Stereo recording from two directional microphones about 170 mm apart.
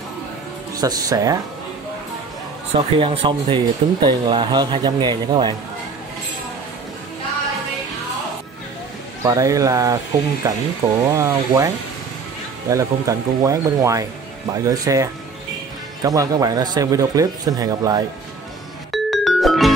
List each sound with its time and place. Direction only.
0.7 s speech: 20° right (ahead or behind)
2.7 s speech: 35° right (ahead or behind)
9.2 s speech: 20° right (ahead or behind)
18.9 s music: centre (ahead or behind)